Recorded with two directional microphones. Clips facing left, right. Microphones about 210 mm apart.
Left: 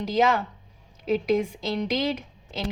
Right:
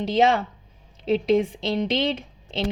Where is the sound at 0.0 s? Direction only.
25° right (ahead or behind).